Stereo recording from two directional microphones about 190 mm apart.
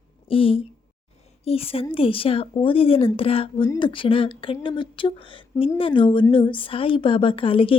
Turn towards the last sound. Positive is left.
turn(degrees=30)  # may be behind; listen again after turning